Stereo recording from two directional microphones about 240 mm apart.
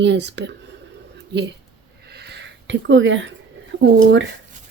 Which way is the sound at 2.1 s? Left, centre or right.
Right.